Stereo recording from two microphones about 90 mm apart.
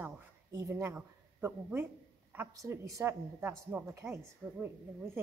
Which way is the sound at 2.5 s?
40° right (ahead or behind).